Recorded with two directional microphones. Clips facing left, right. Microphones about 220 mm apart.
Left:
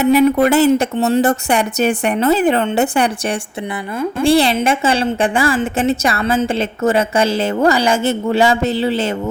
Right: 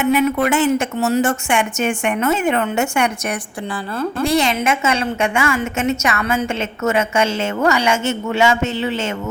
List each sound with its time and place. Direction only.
0.0 s a woman's voice: 35° left (ahead or behind)